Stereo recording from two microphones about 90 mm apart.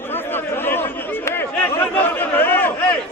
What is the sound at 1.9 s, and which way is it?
Chatter, 20° left (ahead or behind).